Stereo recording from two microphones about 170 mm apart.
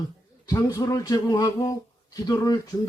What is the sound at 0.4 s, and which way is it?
Speech, 20° left (ahead or behind).